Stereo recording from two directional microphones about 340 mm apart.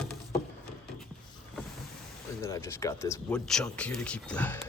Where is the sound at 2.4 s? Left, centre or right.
Centre.